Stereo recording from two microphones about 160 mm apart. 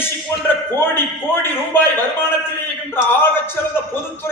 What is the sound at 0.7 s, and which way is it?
A man's voice, 15° left (ahead or behind).